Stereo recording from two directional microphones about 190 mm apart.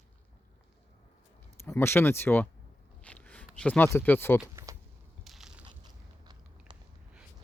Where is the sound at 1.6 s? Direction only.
15° left (ahead or behind).